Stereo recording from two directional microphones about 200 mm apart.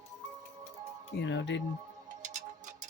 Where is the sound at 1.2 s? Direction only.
60° left (ahead or behind).